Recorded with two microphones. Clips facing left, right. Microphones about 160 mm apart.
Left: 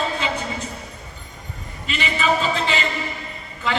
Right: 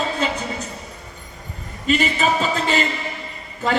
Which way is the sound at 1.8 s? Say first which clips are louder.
Right 3 dB; 45° right (ahead or behind).